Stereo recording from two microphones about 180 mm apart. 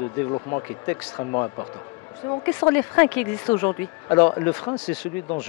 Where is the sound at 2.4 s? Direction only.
10° left (ahead or behind).